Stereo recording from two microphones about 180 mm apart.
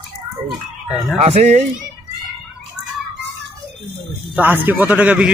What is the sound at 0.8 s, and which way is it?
Speech, centre (ahead or behind).